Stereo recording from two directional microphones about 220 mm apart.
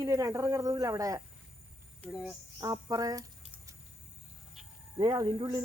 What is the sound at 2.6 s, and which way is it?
Speech, 15° right (ahead or behind).